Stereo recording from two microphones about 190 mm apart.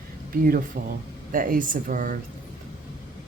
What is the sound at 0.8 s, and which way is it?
Speech, 50° right (ahead or behind).